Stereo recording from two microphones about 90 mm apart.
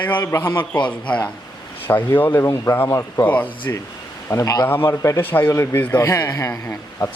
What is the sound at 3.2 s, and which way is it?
Speech, 20° left (ahead or behind).